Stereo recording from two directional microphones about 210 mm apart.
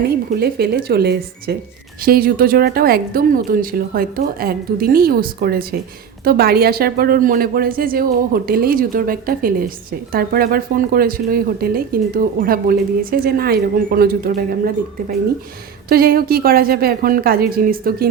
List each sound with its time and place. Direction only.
0.0 s speech: 45° right (ahead or behind)
15.9 s speech: 45° right (ahead or behind)